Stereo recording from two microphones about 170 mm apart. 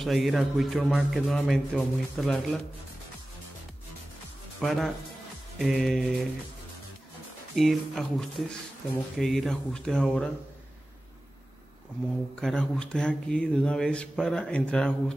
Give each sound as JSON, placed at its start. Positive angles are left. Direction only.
{"t": 0.0, "sound": "speech", "side_deg": 0}
{"t": 4.6, "sound": "speech", "side_deg": 0}
{"t": 7.5, "sound": "speech", "side_deg": 0}
{"t": 12.4, "sound": "speech", "side_deg": 5}